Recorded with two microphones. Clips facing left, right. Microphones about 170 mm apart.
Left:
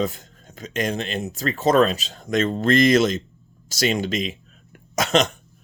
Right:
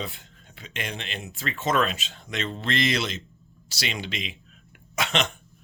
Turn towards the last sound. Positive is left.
turn(degrees=40)  # may be behind; listen again after turning